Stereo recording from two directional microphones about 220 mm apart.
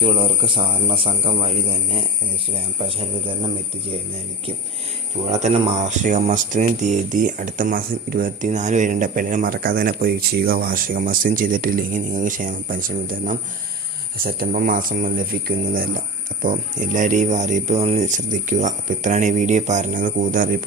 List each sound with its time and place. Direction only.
0.0 s speech: 25° right (ahead or behind)
5.3 s speech: 30° right (ahead or behind)